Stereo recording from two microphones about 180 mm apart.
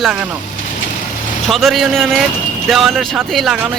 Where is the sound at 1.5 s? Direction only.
Centre (ahead or behind).